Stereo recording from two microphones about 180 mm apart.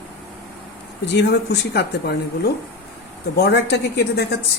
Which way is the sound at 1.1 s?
70° left (ahead or behind).